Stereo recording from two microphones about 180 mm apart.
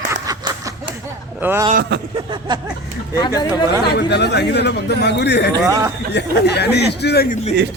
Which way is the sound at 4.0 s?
65° left (ahead or behind).